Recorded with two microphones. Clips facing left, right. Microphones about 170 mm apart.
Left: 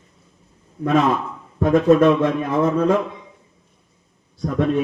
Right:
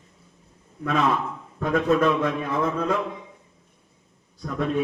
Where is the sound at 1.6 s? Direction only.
40° left (ahead or behind).